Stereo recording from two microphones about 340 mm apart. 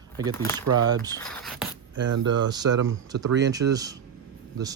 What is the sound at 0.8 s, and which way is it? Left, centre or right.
Speech, centre.